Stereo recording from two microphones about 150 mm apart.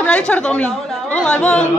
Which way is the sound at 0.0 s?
5° left (ahead or behind).